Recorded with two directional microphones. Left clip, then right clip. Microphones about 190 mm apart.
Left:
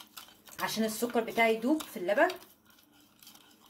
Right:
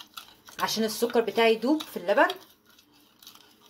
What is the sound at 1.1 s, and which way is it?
Speech, 35° right (ahead or behind).